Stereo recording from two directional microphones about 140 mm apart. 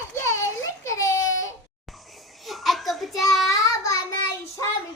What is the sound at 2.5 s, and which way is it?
Child singing, centre (ahead or behind).